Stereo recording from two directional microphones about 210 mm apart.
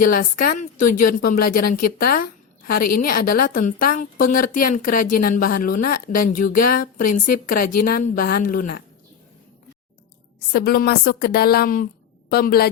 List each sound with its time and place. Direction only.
0.0 s a woman's voice: 40° left (ahead or behind)
10.5 s a woman's voice: 45° left (ahead or behind)